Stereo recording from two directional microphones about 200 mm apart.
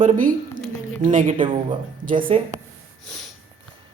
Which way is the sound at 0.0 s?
45° right (ahead or behind).